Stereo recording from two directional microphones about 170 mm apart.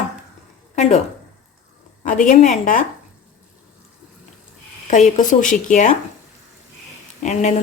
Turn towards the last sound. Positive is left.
turn(degrees=45)  # may be behind; listen again after turning